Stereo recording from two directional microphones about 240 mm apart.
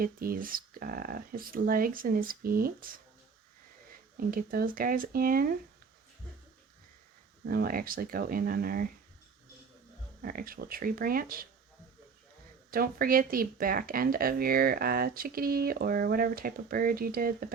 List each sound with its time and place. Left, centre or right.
0.0 s speech: right
4.3 s speech: right
7.4 s speech: right
10.2 s speech: right
12.7 s speech: right